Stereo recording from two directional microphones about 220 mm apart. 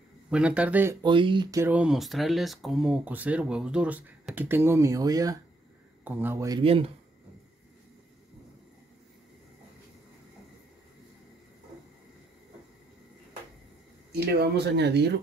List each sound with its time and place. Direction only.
0.3 s speech: 5° right (ahead or behind)
1.0 s speech: 20° right (ahead or behind)
14.1 s speech: 45° right (ahead or behind)